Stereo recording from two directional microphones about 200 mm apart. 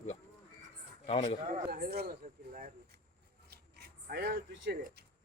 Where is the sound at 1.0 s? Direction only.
30° left (ahead or behind).